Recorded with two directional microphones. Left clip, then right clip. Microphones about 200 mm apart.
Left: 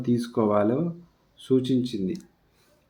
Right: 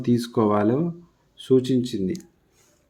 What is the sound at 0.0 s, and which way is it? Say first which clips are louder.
Speech: right 3 dB; 30° right (ahead or behind).